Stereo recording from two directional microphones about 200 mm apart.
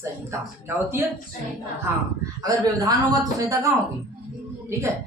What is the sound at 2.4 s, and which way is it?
A man's voice, 15° right (ahead or behind).